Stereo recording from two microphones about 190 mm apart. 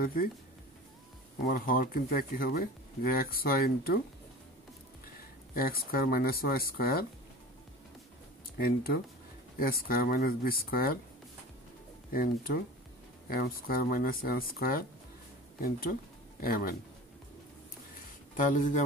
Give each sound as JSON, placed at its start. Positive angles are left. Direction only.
{"t": 0.0, "sound": "speech", "side_deg": 50}
{"t": 1.4, "sound": "speech", "side_deg": 50}
{"t": 5.5, "sound": "speech", "side_deg": 50}
{"t": 8.5, "sound": "speech", "side_deg": 50}
{"t": 12.1, "sound": "speech", "side_deg": 50}
{"t": 18.3, "sound": "speech", "side_deg": 45}